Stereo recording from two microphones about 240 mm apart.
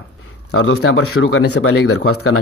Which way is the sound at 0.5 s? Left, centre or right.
Left.